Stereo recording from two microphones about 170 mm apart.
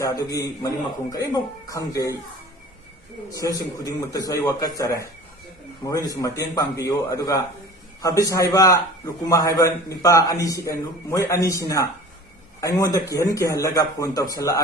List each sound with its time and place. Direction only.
0.0 s a man's voice: 20° left (ahead or behind)
3.4 s a man's voice: 20° left (ahead or behind)